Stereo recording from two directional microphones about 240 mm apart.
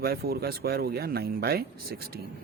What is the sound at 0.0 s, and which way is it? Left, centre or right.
Speech, right.